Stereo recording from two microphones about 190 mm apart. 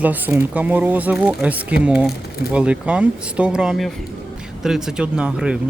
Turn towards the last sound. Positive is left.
turn(degrees=-5)  # may be behind; listen again after turning